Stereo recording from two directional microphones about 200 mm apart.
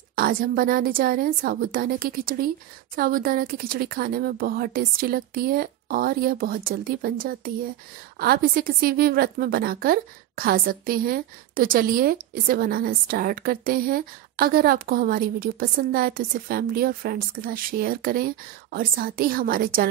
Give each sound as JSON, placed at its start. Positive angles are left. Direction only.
{"t": 0.1, "sound": "a woman's voice", "side_deg": -45}